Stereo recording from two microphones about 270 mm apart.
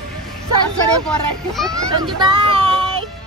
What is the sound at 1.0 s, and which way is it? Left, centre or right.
Speech, centre.